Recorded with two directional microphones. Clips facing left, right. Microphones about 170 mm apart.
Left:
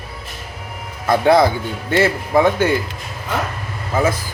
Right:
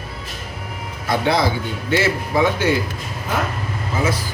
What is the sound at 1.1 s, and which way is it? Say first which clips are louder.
Speech: left 6 dB; 50° left (ahead or behind).